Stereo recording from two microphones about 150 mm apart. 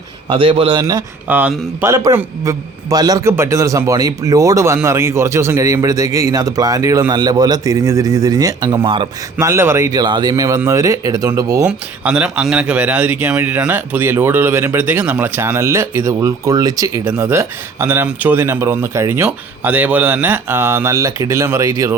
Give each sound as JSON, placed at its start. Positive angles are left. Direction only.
{"t": 0.3, "sound": "a man's voice", "side_deg": -35}
{"t": 1.3, "sound": "a man's voice", "side_deg": -10}
{"t": 9.4, "sound": "a man's voice", "side_deg": -15}
{"t": 12.0, "sound": "speech", "side_deg": -5}